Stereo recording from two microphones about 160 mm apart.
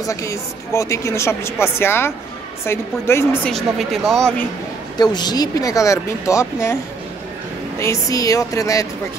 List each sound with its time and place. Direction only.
0.0 s a woman's voice: 20° left (ahead or behind)
3.4 s speech: centre (ahead or behind)
4.9 s speech: 25° left (ahead or behind)
7.8 s speech: 20° left (ahead or behind)